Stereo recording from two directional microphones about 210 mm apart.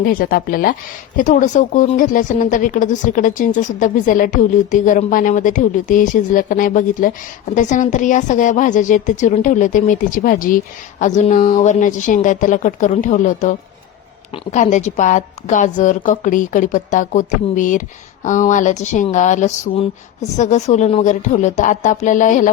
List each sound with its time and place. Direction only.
0.0 s speech: 45° left (ahead or behind)